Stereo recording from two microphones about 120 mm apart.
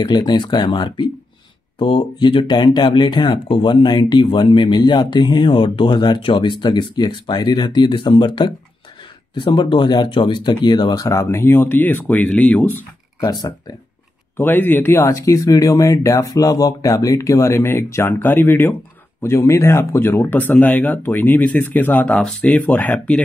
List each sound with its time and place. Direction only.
0.0 s speech: 35° left (ahead or behind); by 12.7 s 15° left (ahead or behind)
13.2 s speech: 35° left (ahead or behind)
14.3 s speech: 15° left (ahead or behind)